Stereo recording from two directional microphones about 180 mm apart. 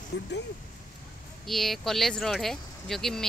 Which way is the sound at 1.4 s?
Centre (ahead or behind).